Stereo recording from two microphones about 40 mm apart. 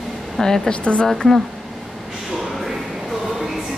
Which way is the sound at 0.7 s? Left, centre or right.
Left.